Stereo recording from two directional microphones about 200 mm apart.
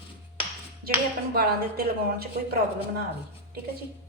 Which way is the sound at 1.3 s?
50° right (ahead or behind).